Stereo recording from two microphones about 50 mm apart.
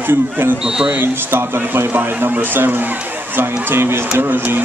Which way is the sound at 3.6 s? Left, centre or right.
Right.